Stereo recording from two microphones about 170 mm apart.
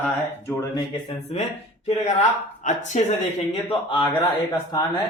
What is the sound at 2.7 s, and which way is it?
Speech, 45° left (ahead or behind).